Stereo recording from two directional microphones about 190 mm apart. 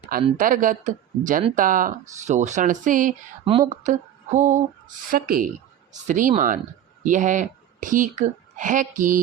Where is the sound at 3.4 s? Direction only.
25° right (ahead or behind).